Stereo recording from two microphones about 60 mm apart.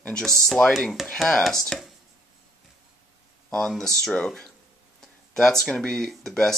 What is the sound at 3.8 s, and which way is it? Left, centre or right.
Speech, centre.